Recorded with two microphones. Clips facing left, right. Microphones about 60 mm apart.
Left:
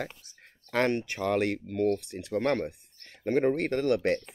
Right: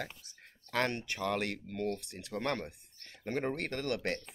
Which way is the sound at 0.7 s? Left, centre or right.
Left.